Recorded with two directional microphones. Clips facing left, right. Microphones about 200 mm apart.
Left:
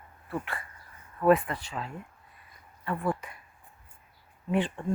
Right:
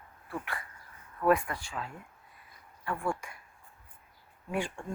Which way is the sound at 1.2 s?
20° left (ahead or behind).